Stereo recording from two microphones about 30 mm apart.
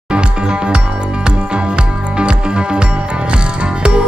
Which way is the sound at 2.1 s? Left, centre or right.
Right.